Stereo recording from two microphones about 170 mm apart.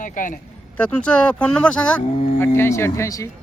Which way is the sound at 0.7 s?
5° left (ahead or behind).